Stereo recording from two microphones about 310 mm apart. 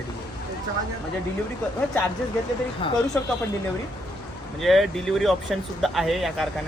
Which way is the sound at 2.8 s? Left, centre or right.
Centre.